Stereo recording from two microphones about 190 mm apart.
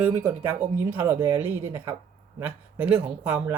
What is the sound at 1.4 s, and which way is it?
Speech, 10° right (ahead or behind).